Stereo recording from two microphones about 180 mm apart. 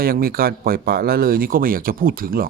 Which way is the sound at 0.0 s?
55° right (ahead or behind).